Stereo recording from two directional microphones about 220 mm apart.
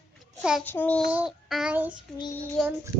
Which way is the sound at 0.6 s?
10° left (ahead or behind).